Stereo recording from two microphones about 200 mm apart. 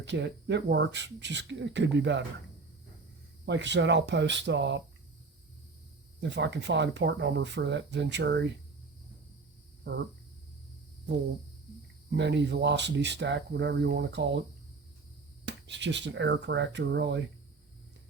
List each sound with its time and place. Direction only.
0.0 s speech: 60° right (ahead or behind)
3.4 s speech: 60° right (ahead or behind)
6.1 s speech: 60° right (ahead or behind)
12.1 s speech: 60° right (ahead or behind)
15.4 s speech: 60° right (ahead or behind)